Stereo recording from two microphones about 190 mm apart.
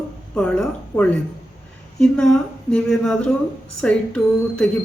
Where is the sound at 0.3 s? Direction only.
5° left (ahead or behind).